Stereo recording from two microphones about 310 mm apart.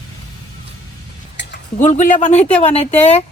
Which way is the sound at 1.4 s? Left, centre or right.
Left.